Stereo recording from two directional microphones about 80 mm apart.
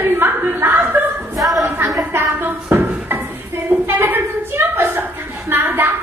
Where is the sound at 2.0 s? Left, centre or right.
Right.